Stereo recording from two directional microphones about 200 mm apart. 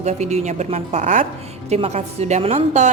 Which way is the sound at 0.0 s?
35° right (ahead or behind).